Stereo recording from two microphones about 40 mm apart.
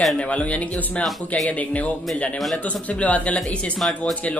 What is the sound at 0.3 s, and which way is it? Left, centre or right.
Speech, left.